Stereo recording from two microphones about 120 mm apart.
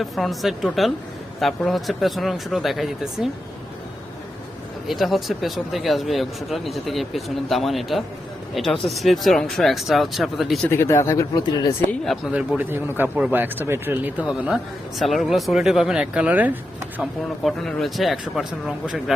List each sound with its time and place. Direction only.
0.0 s speech: centre (ahead or behind)
4.9 s speech: centre (ahead or behind)
10.7 s speech: 20° left (ahead or behind)
11.3 s speech: 35° left (ahead or behind)
12.3 s speech: 10° right (ahead or behind)
17.0 s speech: centre (ahead or behind)